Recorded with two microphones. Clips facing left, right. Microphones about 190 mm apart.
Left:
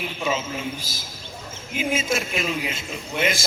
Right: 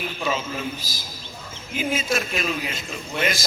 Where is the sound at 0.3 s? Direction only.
25° left (ahead or behind).